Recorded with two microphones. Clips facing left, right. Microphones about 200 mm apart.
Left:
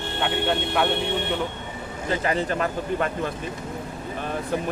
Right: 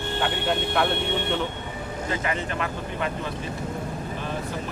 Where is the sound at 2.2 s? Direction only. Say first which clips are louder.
Left 4 dB; 35° left (ahead or behind).